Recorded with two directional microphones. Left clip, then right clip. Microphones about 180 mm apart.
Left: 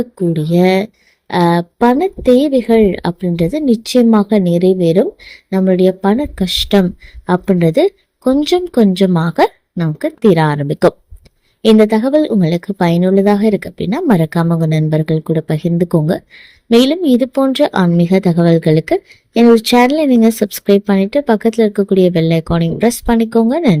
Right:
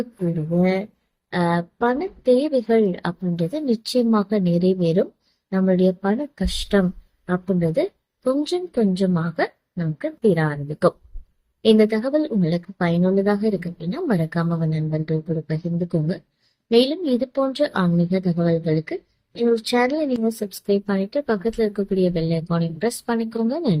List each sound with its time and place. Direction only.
0.6 s speech: 50° left (ahead or behind)